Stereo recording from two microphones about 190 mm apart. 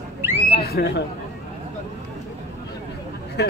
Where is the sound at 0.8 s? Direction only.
60° left (ahead or behind).